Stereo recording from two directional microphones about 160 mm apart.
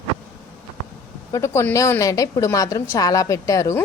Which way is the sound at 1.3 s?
15° left (ahead or behind).